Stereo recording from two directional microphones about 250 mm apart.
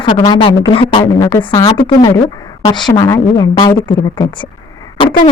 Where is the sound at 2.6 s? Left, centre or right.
Centre.